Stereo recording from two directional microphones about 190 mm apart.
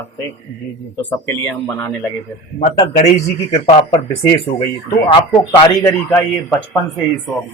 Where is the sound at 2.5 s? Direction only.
35° left (ahead or behind).